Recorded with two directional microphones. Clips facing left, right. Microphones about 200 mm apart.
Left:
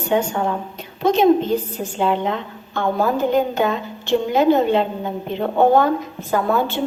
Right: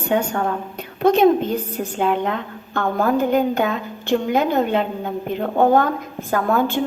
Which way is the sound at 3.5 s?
55° right (ahead or behind).